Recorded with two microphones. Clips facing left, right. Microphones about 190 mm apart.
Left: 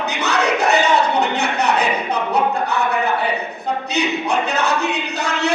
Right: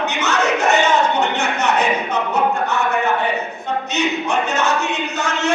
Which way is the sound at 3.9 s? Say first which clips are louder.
Even; 35° left (ahead or behind).